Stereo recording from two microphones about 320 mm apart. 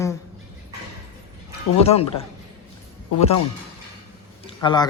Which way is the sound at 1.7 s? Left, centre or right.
Centre.